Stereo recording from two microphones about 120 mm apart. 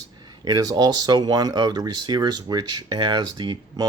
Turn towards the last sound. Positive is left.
turn(degrees=-40)  # may be behind; listen again after turning